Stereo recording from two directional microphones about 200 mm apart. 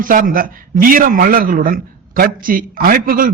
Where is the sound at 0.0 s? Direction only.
45° right (ahead or behind).